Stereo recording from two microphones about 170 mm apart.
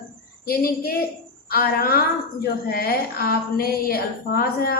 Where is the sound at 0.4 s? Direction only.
60° left (ahead or behind).